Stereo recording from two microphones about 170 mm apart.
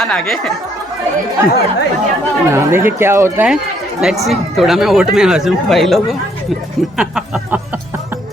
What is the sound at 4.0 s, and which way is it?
Speech, centre (ahead or behind).